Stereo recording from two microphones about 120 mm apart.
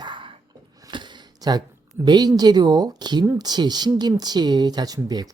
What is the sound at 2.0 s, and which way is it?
Speech, 35° right (ahead or behind).